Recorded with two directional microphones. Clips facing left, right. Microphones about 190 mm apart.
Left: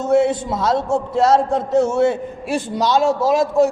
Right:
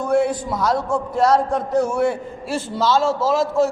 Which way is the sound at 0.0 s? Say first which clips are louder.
Left 3 dB; 25° left (ahead or behind).